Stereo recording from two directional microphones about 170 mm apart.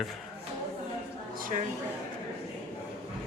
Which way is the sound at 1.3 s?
55° right (ahead or behind).